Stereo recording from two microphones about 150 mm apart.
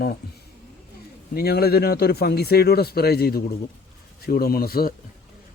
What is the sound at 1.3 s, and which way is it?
Speech, 90° left.